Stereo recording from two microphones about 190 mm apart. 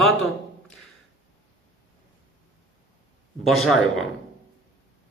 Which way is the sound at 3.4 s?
Centre (ahead or behind).